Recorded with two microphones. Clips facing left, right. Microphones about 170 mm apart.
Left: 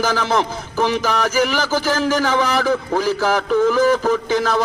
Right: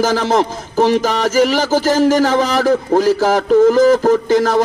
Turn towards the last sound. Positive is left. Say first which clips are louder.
# right 5 dB
turn(degrees=-45)  # may be behind; listen again after turning